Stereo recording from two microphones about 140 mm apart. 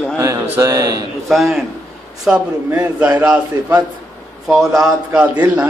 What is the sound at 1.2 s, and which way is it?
A man's voice, centre (ahead or behind).